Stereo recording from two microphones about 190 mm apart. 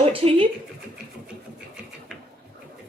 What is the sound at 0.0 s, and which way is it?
Speech, 30° right (ahead or behind).